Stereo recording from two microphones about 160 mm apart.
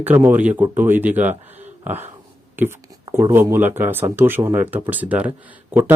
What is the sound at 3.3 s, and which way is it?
Speech, 15° right (ahead or behind).